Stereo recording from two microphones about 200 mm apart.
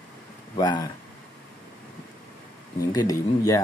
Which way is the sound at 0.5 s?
20° left (ahead or behind).